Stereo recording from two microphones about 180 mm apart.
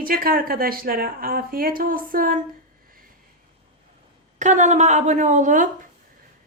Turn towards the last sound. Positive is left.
turn(degrees=-45)  # may be behind; listen again after turning